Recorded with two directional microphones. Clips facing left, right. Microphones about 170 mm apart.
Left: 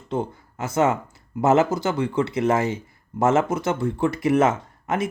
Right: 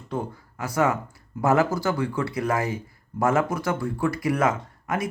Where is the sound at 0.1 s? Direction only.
25° left (ahead or behind).